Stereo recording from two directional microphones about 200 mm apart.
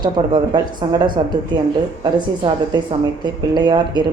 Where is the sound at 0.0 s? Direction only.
20° right (ahead or behind).